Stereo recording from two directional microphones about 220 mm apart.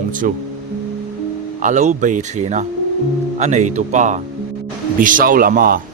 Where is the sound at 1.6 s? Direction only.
35° right (ahead or behind).